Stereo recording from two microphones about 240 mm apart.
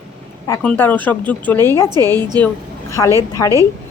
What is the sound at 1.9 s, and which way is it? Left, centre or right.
Speech, centre.